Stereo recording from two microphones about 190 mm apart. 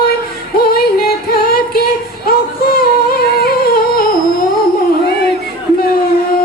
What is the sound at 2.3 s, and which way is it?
Humming, 50° left (ahead or behind).